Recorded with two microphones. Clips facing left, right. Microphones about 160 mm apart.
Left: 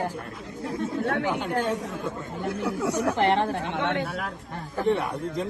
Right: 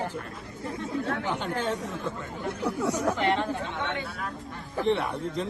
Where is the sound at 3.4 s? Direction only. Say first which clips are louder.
Left 4 dB; 65° left (ahead or behind).